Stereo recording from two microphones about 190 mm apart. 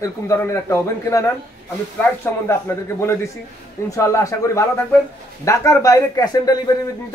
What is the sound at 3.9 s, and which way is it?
A man's voice, 15° left (ahead or behind).